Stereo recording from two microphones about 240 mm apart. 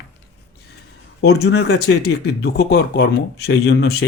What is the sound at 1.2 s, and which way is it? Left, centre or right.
Speech, left.